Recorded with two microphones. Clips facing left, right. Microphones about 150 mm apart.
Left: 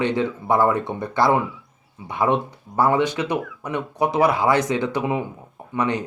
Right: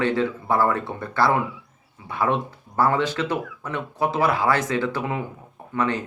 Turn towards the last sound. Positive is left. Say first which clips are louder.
# left 1 dB
turn(degrees=15)  # may be behind; listen again after turning